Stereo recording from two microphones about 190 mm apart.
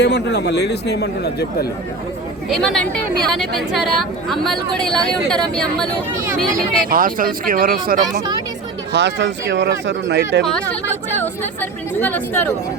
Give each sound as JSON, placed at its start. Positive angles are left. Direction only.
{"t": 0.0, "sound": "a man's voice", "side_deg": 65}
{"t": 2.5, "sound": "speech", "side_deg": 0}
{"t": 6.9, "sound": "speech", "side_deg": -45}
{"t": 8.9, "sound": "speech", "side_deg": -65}
{"t": 10.4, "sound": "speech", "side_deg": 5}